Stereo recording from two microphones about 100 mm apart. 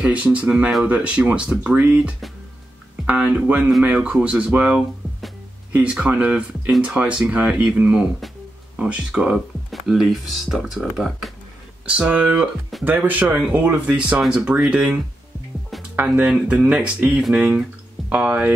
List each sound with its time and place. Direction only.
0.0 s speech: 15° right (ahead or behind)
11.9 s speech: 10° right (ahead or behind)
16.1 s speech: 5° right (ahead or behind)